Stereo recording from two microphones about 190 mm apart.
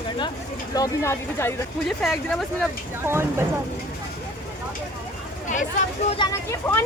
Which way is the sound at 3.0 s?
15° right (ahead or behind).